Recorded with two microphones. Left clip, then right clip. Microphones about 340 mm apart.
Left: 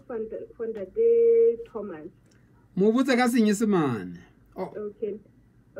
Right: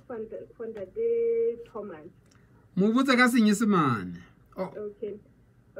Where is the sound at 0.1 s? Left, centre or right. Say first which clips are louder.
Left 4 dB; left.